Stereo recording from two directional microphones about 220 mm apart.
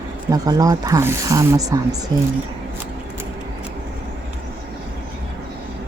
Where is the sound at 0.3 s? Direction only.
15° right (ahead or behind).